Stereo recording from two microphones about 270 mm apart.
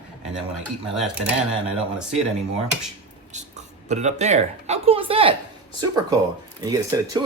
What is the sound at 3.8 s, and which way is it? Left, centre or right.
Speech, right.